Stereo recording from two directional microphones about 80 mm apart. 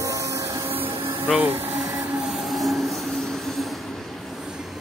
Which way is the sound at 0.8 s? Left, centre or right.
Right.